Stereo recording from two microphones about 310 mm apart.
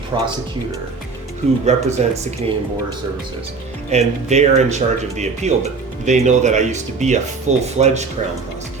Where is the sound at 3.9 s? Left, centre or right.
Right.